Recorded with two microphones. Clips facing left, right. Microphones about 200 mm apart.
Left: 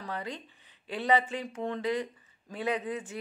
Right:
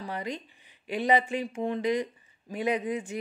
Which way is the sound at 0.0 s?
15° right (ahead or behind).